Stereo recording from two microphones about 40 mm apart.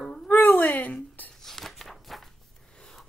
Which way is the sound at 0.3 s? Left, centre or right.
Left.